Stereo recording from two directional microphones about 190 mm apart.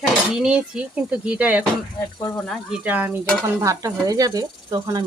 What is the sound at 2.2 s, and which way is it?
Cutlery, 5° left (ahead or behind).